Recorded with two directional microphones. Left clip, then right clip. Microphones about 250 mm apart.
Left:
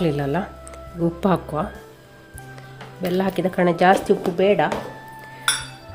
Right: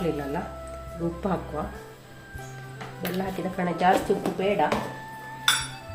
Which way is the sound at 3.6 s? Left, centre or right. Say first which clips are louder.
Left 6 dB; left.